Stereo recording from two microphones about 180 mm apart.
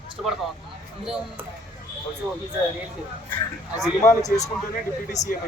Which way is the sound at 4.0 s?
15° left (ahead or behind).